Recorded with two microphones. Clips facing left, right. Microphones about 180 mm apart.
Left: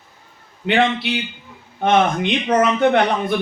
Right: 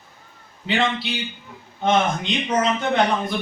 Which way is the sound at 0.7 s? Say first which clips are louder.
Left 5 dB; 60° left (ahead or behind).